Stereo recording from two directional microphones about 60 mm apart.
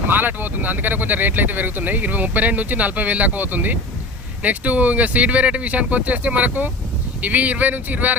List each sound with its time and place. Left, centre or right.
0.1 s speech: right